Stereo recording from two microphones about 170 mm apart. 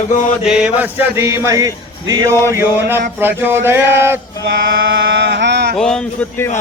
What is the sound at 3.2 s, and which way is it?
Music, 10° right (ahead or behind).